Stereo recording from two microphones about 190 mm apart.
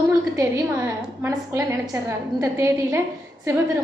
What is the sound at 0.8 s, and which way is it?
A woman's voice, 15° right (ahead or behind).